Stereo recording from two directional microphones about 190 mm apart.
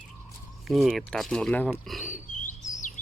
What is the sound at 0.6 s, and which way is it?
Speech, centre (ahead or behind).